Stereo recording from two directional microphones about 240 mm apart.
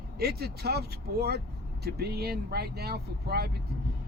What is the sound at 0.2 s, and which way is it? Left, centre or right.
Speech, right.